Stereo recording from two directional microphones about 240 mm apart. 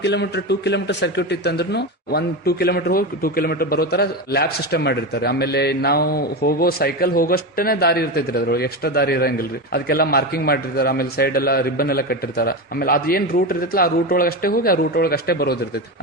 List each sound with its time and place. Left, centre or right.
0.0 s a man's voice: left